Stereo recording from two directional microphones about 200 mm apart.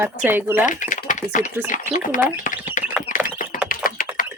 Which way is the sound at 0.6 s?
40° left (ahead or behind).